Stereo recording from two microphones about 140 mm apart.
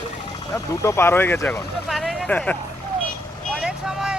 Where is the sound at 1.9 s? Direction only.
Centre (ahead or behind).